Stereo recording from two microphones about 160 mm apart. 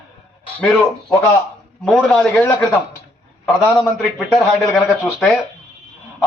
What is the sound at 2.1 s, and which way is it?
A man's voice, 10° left (ahead or behind).